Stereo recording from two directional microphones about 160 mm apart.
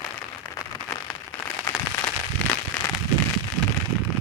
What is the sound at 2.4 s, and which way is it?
Fireworks, 5° left (ahead or behind).